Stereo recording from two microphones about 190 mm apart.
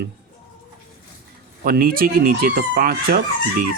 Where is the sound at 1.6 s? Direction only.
50° right (ahead or behind).